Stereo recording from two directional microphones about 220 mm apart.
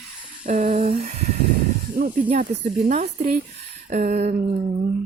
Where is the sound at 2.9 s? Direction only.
35° right (ahead or behind).